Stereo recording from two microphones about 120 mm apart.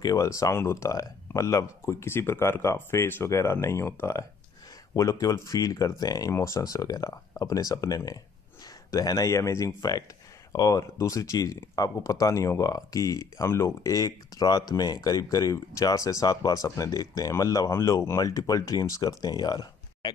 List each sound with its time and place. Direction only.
0.0 s speech: 25° left (ahead or behind)